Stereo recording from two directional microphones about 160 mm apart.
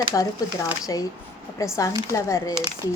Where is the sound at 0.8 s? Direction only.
20° left (ahead or behind).